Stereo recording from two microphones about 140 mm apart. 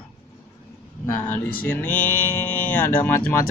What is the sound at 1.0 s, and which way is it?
Speech, 15° left (ahead or behind).